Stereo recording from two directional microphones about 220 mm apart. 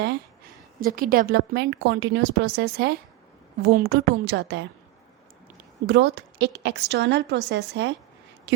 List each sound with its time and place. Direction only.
0.8 s a woman's voice: 40° right (ahead or behind)
5.8 s a woman's voice: 55° right (ahead or behind)